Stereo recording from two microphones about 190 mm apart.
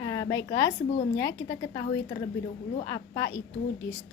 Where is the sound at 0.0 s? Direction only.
15° left (ahead or behind).